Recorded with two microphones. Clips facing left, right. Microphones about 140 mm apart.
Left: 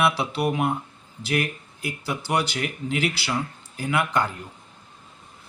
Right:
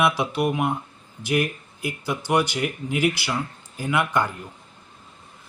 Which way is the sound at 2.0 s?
15° right (ahead or behind).